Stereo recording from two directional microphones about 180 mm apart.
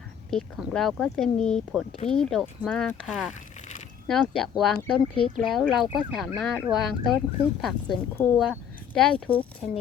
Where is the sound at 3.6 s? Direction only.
40° left (ahead or behind).